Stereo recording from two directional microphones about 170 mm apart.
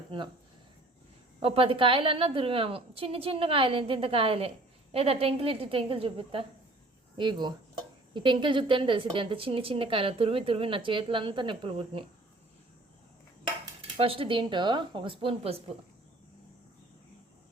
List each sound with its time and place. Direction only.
1.4 s a woman's voice: 30° right (ahead or behind)
13.9 s a woman's voice: 35° right (ahead or behind)